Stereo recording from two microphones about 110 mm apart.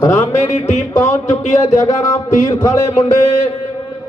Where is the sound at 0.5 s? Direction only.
90° left.